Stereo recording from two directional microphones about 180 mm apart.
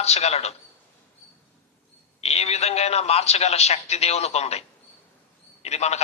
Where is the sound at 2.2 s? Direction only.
35° left (ahead or behind).